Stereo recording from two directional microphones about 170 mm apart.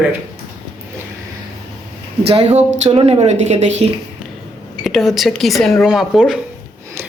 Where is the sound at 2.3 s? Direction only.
40° right (ahead or behind).